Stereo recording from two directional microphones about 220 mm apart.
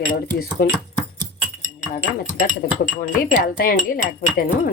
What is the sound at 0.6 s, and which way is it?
Speech, 45° left (ahead or behind).